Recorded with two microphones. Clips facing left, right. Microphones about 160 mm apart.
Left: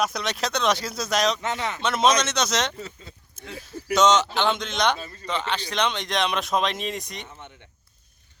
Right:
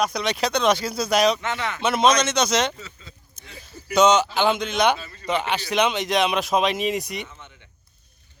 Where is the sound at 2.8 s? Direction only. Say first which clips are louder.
Left 4 dB; 55° left (ahead or behind).